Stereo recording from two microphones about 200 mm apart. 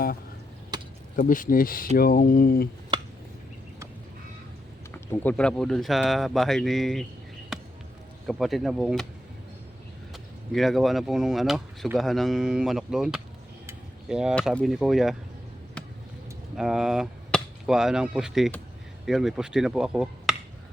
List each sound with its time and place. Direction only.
0.7 s a sound: 20° right (ahead or behind)
1.1 s speech: 40° left (ahead or behind)
4.9 s speech: 5° left (ahead or behind)
8.3 s speech: centre (ahead or behind)
10.1 s speech: centre (ahead or behind)
16.6 s speech: centre (ahead or behind)